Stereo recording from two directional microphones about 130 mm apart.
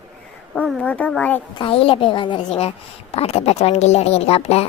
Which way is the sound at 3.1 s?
50° left (ahead or behind).